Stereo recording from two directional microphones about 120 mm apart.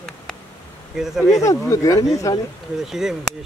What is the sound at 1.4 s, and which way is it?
Speech, 25° left (ahead or behind).